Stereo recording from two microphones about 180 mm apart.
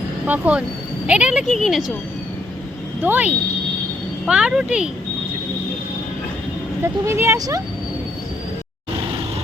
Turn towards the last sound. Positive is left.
turn(degrees=-20)  # may be behind; listen again after turning